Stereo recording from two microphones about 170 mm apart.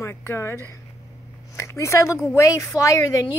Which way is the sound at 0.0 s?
15° left (ahead or behind).